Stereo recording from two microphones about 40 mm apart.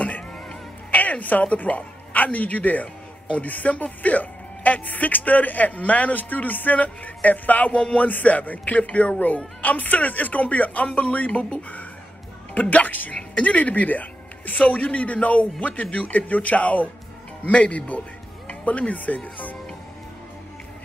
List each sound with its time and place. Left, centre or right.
0.9 s music: left
1.4 s a woman's voice: left